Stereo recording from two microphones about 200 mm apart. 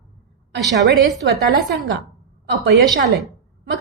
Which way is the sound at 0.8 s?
60° right (ahead or behind).